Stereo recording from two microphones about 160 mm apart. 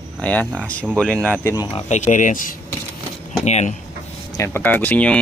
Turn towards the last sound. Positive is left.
turn(degrees=10)  # may be behind; listen again after turning